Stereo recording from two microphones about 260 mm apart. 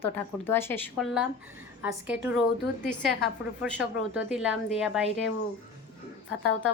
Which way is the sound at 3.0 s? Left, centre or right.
Centre.